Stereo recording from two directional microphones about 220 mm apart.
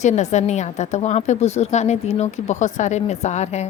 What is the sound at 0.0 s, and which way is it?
A woman's voice, 30° left (ahead or behind).